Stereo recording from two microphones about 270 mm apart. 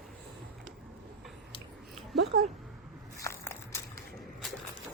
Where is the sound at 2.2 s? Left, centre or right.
Right.